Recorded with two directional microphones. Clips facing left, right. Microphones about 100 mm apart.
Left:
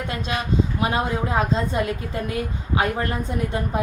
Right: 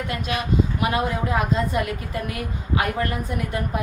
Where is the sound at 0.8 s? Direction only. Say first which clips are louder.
Even; 30° left (ahead or behind).